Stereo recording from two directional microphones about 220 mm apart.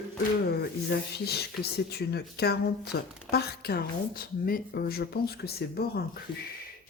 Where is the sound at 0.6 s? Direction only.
45° left (ahead or behind).